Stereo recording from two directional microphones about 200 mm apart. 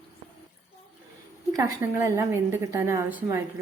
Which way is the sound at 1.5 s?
15° right (ahead or behind).